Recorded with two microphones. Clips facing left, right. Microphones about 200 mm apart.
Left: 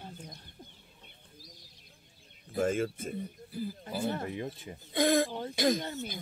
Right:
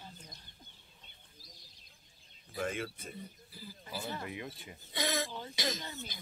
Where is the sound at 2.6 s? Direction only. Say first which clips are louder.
Left 8 dB; 45° left (ahead or behind).